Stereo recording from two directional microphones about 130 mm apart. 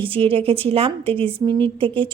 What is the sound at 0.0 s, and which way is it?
A woman's voice, 45° right (ahead or behind).